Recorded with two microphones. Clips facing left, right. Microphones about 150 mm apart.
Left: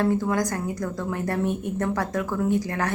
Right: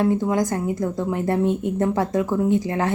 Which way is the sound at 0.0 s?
20° right (ahead or behind).